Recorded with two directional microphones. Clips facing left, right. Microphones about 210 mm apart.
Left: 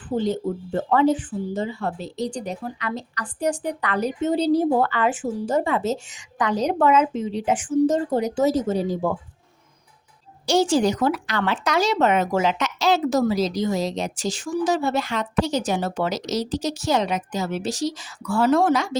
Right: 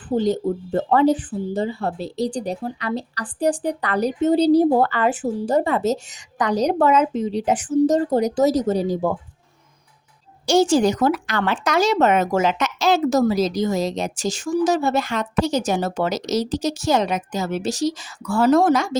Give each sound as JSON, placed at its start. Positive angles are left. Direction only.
{"t": 0.1, "sound": "speech", "side_deg": -40}
{"t": 10.4, "sound": "a woman's voice", "side_deg": -45}